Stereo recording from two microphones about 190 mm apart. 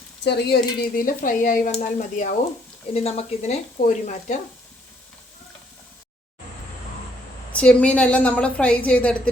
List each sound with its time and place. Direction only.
0.3 s speech: 60° left (ahead or behind); by 2.3 s 40° left (ahead or behind)
2.9 s speech: 30° left (ahead or behind)
7.5 s a woman's voice: 5° left (ahead or behind)